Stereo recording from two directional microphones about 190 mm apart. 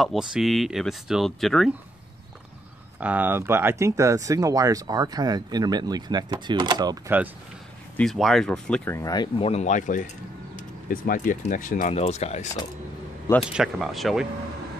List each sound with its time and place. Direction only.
0.0 s speech: centre (ahead or behind)
3.0 s speech: 10° right (ahead or behind)
8.0 s speech: centre (ahead or behind); by 12.4 s 35° left (ahead or behind)
13.4 s speech: 5° right (ahead or behind)